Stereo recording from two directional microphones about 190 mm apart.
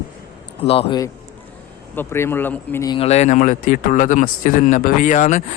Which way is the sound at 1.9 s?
10° left (ahead or behind).